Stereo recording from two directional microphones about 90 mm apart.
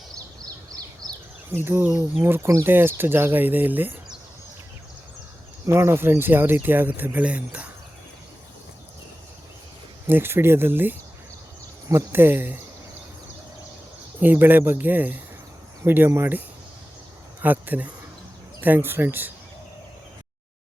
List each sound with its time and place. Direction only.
1.5 s speech: 25° right (ahead or behind)
2.6 s speech: 25° right (ahead or behind)
5.6 s speech: 30° right (ahead or behind); by 7.7 s 15° right (ahead or behind)
10.1 s speech: 25° right (ahead or behind)
14.2 s speech: 20° right (ahead or behind)
17.4 s speech: 20° right (ahead or behind)